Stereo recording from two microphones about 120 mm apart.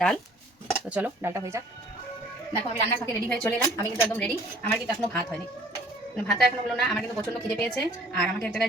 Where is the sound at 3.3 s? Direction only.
5° left (ahead or behind).